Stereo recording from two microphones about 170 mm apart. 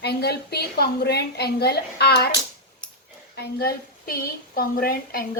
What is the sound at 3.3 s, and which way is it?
A woman's voice, 65° left (ahead or behind).